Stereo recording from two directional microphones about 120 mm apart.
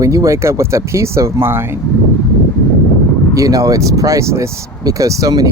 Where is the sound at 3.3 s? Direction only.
30° right (ahead or behind).